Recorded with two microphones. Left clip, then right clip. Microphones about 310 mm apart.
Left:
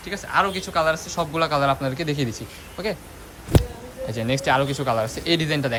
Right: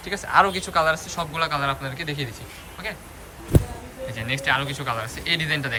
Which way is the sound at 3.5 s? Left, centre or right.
Centre.